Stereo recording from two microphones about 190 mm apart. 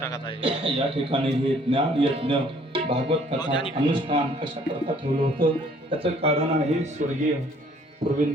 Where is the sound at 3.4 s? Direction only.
25° left (ahead or behind).